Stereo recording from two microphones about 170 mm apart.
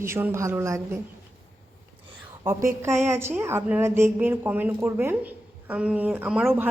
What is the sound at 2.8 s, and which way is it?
Speech, 15° right (ahead or behind).